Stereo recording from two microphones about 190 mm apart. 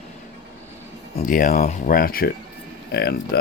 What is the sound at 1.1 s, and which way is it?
Speech, 45° left (ahead or behind).